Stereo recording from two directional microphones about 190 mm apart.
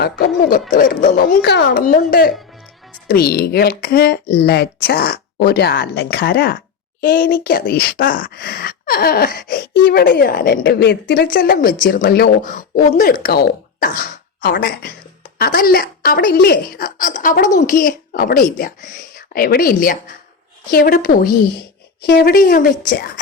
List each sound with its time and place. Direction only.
0.0 s a woman's voice: 50° left (ahead or behind)